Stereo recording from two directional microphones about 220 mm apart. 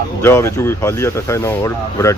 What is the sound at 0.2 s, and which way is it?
Speech, 10° left (ahead or behind).